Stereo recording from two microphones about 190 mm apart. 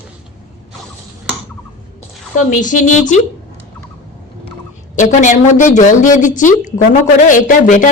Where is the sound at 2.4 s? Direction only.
40° left (ahead or behind).